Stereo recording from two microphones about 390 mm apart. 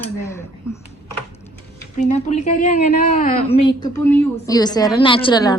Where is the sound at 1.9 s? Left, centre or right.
Centre.